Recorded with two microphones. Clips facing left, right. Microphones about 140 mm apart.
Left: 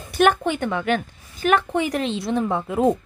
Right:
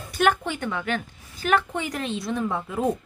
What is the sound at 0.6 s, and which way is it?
Speech, 60° left (ahead or behind).